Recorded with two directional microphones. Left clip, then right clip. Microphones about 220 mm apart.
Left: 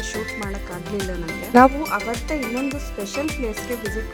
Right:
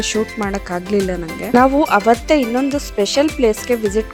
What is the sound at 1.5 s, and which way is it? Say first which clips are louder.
Speech: right 1 dB; centre (ahead or behind).